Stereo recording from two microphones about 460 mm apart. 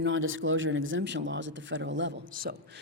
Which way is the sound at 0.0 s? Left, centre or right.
Right.